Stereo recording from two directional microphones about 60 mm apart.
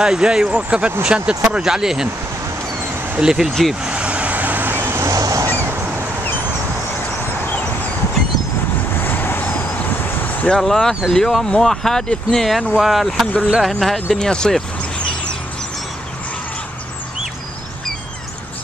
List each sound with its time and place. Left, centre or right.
0.0 s speech: centre
3.2 s speech: centre
3.4 s speech: centre
3.8 s vehicle: centre; by 5.0 s right
5.0 s a sound: right
5.5 s a sound: right
9.0 s vehicle: left
10.6 s speech: centre